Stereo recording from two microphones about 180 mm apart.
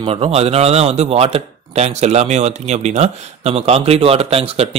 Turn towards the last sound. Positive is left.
turn(degrees=-35)  # may be behind; listen again after turning